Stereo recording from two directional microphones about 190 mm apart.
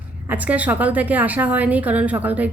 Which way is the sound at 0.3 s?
10° right (ahead or behind).